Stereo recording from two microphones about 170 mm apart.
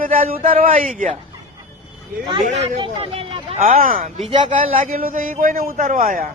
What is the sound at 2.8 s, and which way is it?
A man's voice, 35° right (ahead or behind).